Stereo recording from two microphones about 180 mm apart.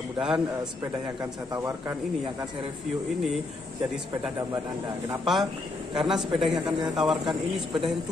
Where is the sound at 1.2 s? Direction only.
20° right (ahead or behind).